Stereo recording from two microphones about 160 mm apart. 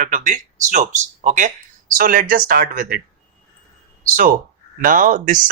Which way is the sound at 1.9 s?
60° right (ahead or behind).